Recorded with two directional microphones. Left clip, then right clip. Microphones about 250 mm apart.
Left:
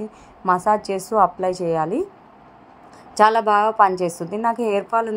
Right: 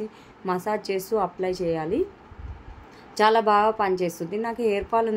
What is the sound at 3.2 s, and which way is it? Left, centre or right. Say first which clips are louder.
A woman's voice: left 4 dB; centre.